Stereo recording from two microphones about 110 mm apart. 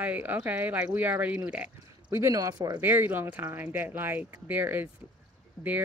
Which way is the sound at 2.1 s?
25° right (ahead or behind).